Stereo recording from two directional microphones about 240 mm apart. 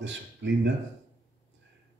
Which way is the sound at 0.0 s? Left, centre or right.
Right.